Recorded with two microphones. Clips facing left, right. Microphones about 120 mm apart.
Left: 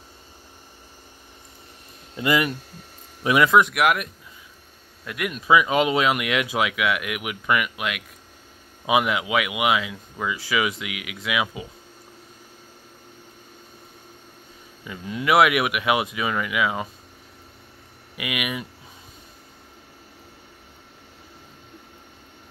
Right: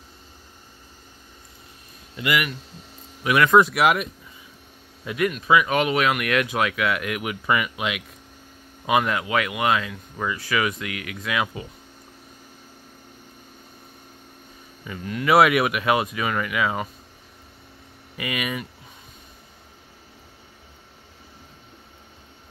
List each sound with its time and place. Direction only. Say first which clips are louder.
2.1 s speech: left 3 dB; 30° left (ahead or behind)
3.7 s speech: right 1 dB; 5° right (ahead or behind)
5.5 s speech: left 2 dB; 20° left (ahead or behind); by 8.0 s centre (ahead or behind)
8.8 s speech: even; 10° left (ahead or behind)
15.2 s speech: right 1 dB; 5° left (ahead or behind)
18.1 s speech: right 1 dB; 10° left (ahead or behind)